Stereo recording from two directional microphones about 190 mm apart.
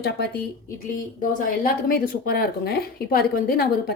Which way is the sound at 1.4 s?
50° left (ahead or behind).